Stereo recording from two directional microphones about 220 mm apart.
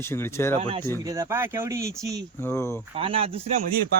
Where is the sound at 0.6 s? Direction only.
25° right (ahead or behind).